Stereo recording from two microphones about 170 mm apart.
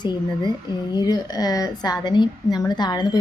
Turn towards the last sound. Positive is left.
turn(degrees=25)  # may be behind; listen again after turning